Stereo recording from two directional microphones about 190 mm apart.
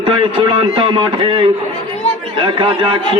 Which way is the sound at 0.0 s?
25° right (ahead or behind).